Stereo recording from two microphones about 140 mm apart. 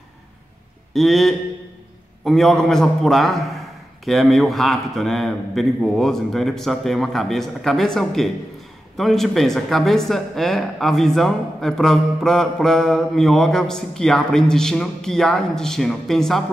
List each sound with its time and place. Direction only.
0.9 s speech: centre (ahead or behind)